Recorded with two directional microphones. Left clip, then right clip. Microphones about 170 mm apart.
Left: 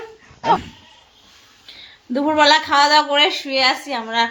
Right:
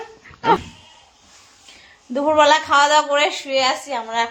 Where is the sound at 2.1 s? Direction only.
15° left (ahead or behind).